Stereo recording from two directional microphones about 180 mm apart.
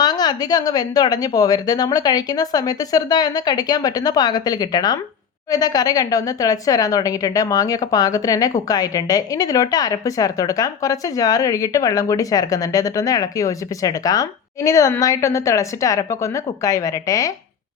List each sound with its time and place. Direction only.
0.0 s a woman's voice: 20° left (ahead or behind)